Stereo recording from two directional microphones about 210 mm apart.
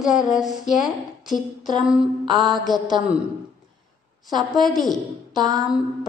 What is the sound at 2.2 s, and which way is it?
Speech, 20° right (ahead or behind).